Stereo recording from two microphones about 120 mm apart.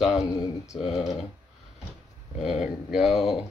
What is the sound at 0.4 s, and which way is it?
Speech, 45° left (ahead or behind).